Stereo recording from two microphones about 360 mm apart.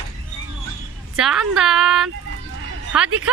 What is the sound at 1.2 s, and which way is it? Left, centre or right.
Speech, centre.